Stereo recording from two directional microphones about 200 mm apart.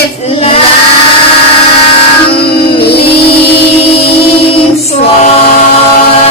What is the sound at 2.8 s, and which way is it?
Music, 55° left (ahead or behind).